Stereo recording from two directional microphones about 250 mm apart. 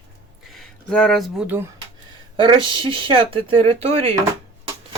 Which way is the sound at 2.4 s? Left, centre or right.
Centre.